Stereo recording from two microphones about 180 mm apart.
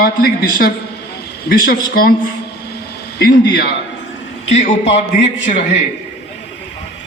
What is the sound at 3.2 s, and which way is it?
Speech, 60° left (ahead or behind).